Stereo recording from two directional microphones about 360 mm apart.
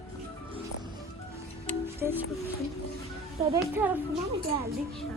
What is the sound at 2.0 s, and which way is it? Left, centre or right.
Speech, centre.